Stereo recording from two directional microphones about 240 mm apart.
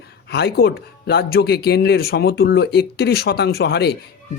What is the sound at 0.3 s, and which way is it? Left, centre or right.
A man's voice, left.